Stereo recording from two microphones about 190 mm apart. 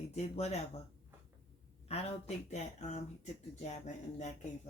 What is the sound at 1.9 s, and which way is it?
Speech, 35° left (ahead or behind).